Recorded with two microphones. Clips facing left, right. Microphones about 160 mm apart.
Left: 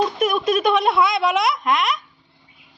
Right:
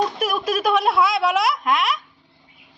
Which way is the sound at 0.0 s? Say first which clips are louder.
Left 3 dB; 5° right (ahead or behind).